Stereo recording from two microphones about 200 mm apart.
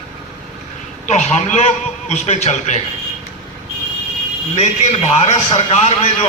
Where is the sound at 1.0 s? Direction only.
35° left (ahead or behind).